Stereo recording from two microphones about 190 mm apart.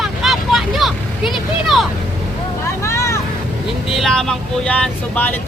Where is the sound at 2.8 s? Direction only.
15° left (ahead or behind).